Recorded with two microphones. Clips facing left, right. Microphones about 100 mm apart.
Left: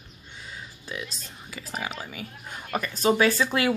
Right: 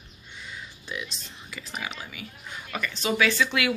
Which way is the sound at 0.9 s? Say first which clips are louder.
Even; 40° left (ahead or behind).